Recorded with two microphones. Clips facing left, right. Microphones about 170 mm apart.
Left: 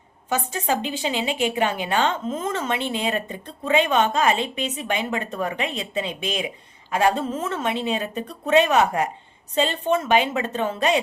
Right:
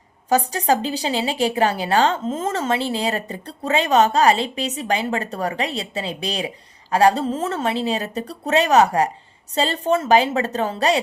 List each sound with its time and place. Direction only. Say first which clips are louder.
0.3 s a woman's voice: right 6 dB; 40° right (ahead or behind)